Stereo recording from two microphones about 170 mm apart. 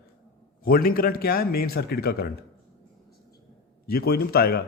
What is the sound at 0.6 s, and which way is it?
A man's voice, 60° left (ahead or behind).